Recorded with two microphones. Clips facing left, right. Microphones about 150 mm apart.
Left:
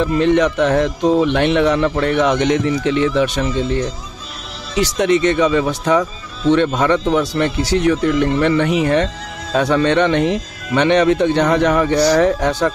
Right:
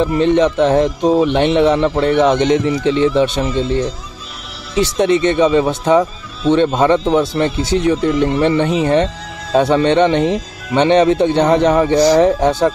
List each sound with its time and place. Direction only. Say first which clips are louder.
0.0 s speech: right 1 dB; 20° right (ahead or behind)